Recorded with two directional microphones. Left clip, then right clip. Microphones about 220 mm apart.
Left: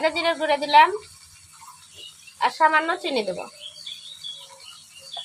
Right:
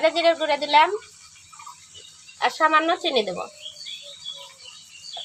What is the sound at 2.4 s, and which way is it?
Speech, 25° right (ahead or behind).